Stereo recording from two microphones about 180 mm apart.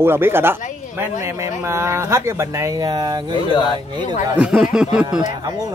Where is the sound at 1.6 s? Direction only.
15° right (ahead or behind).